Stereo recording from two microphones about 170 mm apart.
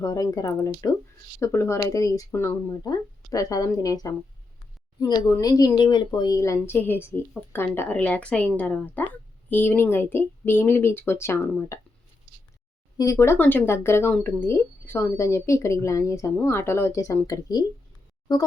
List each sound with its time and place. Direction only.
0.0 s speech: 20° left (ahead or behind)
13.0 s speech: 20° left (ahead or behind)